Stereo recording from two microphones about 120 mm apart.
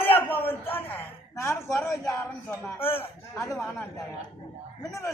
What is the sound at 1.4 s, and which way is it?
A man's voice, 25° left (ahead or behind).